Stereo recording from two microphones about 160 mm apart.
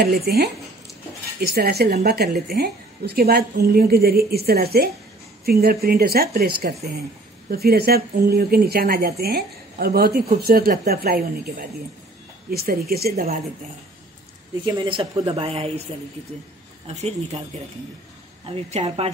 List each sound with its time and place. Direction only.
0.0 s a woman's voice: 75° right (ahead or behind)
14.6 s speech: 25° right (ahead or behind)
16.8 s speech: 40° right (ahead or behind)
18.5 s speech: 40° right (ahead or behind)